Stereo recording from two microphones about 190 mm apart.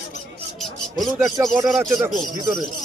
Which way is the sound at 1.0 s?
20° right (ahead or behind).